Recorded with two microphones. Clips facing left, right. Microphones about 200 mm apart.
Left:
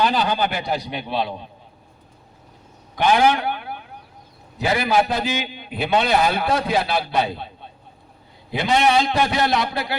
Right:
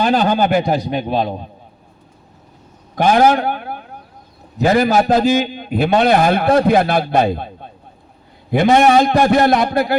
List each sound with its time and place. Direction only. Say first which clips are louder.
0.0 s a man's voice: right 6 dB; 50° right (ahead or behind)
2.9 s a sound: right 5 dB; 45° right (ahead or behind)
4.5 s a man's voice: right 6 dB; 45° right (ahead or behind)